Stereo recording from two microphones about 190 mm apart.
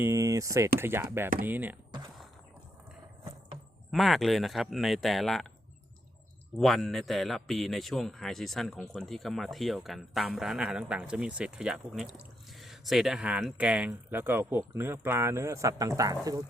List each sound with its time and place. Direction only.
0.0 s speech: 15° right (ahead or behind)
3.9 s a man's voice: centre (ahead or behind)
6.6 s a man's voice: centre (ahead or behind); by 16.4 s 20° right (ahead or behind)